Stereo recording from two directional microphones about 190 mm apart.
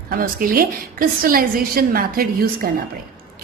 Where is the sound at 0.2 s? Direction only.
50° right (ahead or behind).